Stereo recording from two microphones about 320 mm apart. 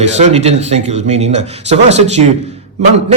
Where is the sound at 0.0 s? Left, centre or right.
Centre.